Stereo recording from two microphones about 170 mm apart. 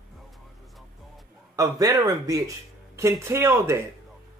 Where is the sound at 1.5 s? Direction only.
20° right (ahead or behind).